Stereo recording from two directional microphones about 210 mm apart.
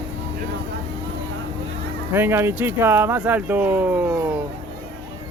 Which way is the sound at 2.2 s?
10° right (ahead or behind).